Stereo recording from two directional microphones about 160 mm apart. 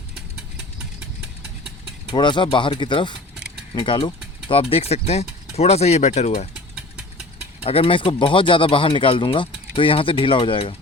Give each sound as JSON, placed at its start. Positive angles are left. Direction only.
{"t": 2.0, "sound": "speech", "side_deg": 30}
{"t": 7.6, "sound": "speech", "side_deg": 35}